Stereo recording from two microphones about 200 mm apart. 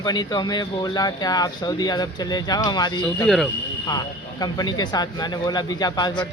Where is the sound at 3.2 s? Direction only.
Centre (ahead or behind).